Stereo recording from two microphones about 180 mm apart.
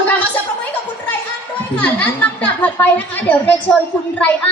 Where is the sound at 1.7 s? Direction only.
10° left (ahead or behind).